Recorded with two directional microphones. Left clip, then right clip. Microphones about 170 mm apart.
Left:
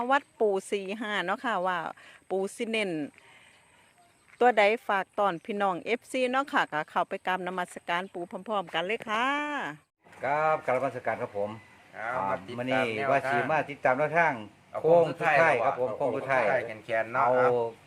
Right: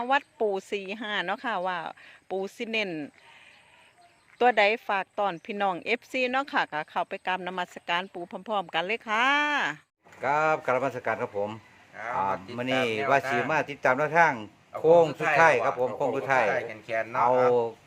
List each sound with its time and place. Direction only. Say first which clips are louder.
0.0 s speech: even; 5° left (ahead or behind)
4.4 s speech: even; 5° left (ahead or behind)
10.2 s speech: right 2 dB; 50° right (ahead or behind)
13.2 s speech: even; 5° right (ahead or behind)
13.5 s speech: right 1 dB; 45° right (ahead or behind)
15.0 s speech: even; centre (ahead or behind)
15.4 s speech: right 4 dB; 45° right (ahead or behind)
16.5 s speech: left 1 dB; centre (ahead or behind)